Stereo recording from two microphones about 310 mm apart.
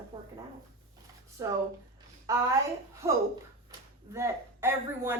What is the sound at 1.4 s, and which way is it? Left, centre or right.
A woman's voice, centre.